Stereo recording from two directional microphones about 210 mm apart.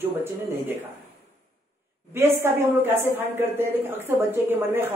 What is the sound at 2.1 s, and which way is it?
A woman's voice, 10° right (ahead or behind).